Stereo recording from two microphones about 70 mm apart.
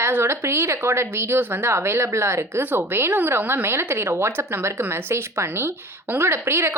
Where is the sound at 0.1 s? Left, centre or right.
Right.